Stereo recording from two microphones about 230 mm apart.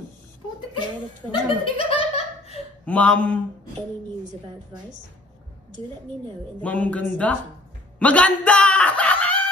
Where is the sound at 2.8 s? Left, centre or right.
Centre.